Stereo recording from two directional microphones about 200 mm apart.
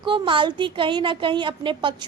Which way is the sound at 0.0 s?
25° right (ahead or behind).